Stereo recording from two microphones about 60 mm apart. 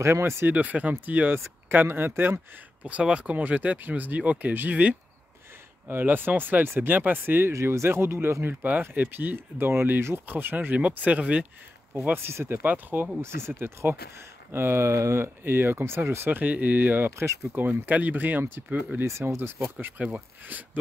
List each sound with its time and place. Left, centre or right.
0.0 s speech: right
0.5 s speech: right
2.8 s speech: centre; by 7.5 s right
7.5 s speech: right
12.6 s speech: right
13.2 s speech: right
16.3 s speech: right
19.0 s speech: right
20.0 s speech: right